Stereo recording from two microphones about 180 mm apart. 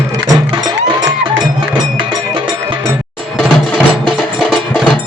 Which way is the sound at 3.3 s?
Centre (ahead or behind).